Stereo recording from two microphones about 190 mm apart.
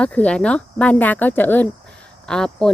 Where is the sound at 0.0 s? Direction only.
5° left (ahead or behind).